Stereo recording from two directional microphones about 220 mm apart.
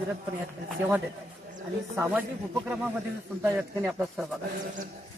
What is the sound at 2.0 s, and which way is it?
Speech, 5° right (ahead or behind).